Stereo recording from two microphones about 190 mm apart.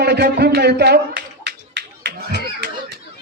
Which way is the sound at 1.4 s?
65° right (ahead or behind).